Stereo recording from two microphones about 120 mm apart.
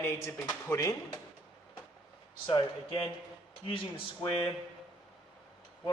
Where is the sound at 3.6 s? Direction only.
45° left (ahead or behind).